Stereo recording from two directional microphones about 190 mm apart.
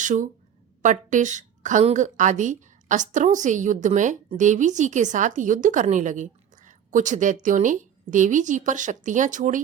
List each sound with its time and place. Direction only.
0.0 s a woman's voice: 40° right (ahead or behind)